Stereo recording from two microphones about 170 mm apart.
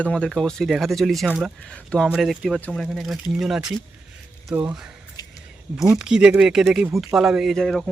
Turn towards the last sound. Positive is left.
turn(degrees=0)  # may be behind; listen again after turning